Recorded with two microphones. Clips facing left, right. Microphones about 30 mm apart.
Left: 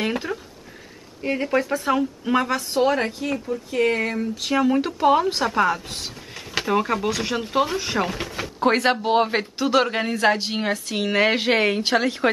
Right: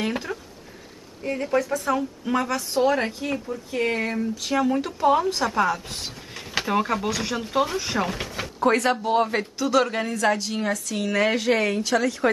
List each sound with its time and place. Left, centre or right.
0.3 s speech: centre
1.2 s a woman's voice: left
2.3 s a woman's voice: left
4.2 s a woman's voice: left
5.5 s a woman's voice: centre
8.5 s a woman's voice: left